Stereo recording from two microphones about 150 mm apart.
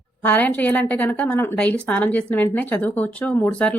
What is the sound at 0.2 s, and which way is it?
Speech, 10° left (ahead or behind).